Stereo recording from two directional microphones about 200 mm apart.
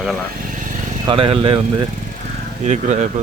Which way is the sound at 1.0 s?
25° right (ahead or behind).